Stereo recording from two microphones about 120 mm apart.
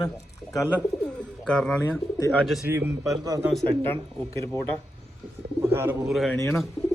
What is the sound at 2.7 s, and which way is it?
Speech, 20° right (ahead or behind).